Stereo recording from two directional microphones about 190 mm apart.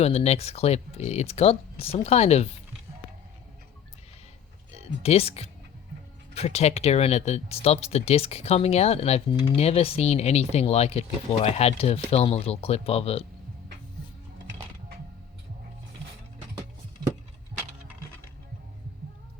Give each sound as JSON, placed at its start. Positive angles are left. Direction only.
{"t": 0.0, "sound": "speech", "side_deg": 35}
{"t": 5.0, "sound": "speech", "side_deg": 35}